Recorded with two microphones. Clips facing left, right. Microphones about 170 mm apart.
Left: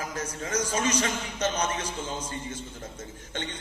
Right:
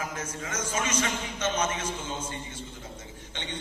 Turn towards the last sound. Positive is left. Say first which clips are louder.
# left 5 dB
turn(degrees=45)  # may be behind; listen again after turning